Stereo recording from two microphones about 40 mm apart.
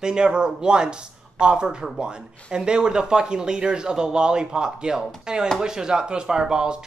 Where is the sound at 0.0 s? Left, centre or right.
Right.